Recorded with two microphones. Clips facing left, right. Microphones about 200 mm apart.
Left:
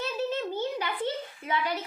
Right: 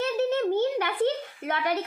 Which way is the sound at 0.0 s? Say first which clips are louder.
Right 6 dB; 55° right (ahead or behind).